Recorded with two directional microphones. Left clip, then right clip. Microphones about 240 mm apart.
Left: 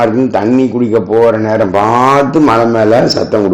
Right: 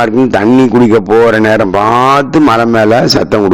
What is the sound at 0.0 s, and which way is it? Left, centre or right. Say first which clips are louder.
A man's voice: right 2 dB; right.